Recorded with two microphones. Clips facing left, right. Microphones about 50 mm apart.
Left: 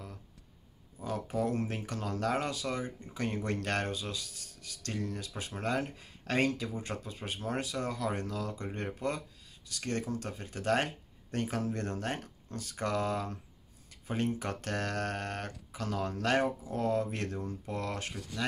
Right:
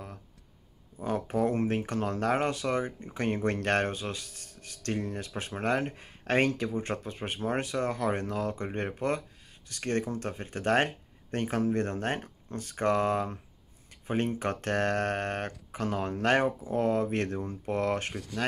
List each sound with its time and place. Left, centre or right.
1.0 s speech: right